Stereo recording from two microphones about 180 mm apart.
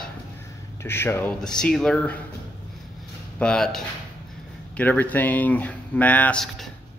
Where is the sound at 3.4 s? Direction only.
5° left (ahead or behind).